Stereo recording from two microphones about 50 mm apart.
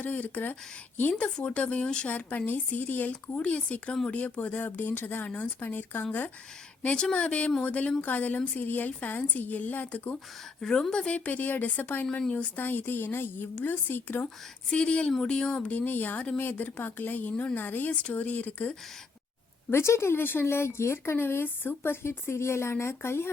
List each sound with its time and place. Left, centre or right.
0.0 s speech: left
1.4 s a woman's voice: left
2.0 s a woman's voice: left
5.2 s a woman's voice: left
5.5 s speech: left
6.9 s a woman's voice: left
10.6 s a woman's voice: centre
11.3 s speech: left
14.7 s a woman's voice: left
15.6 s speech: left
19.7 s a woman's voice: left